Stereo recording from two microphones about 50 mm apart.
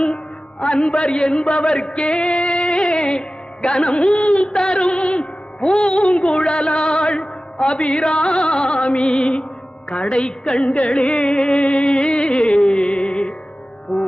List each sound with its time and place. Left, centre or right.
0.6 s a man's voice: centre
3.0 s music: centre
5.7 s a man's voice: centre
6.5 s a man's voice: centre
7.1 s a man's voice: centre
10.2 s music: centre